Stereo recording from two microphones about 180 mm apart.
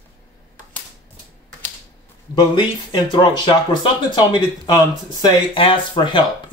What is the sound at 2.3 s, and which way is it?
Speech, 25° left (ahead or behind).